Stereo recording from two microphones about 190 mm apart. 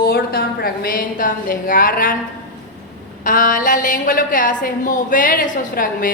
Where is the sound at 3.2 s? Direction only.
45° left (ahead or behind).